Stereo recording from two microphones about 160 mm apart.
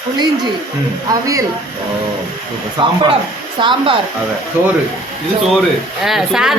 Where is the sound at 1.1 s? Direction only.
20° right (ahead or behind).